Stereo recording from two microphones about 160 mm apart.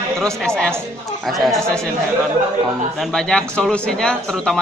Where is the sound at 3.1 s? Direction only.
5° left (ahead or behind).